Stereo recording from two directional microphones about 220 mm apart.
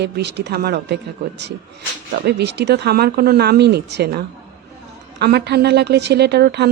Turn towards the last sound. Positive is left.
turn(degrees=-45)  # may be behind; listen again after turning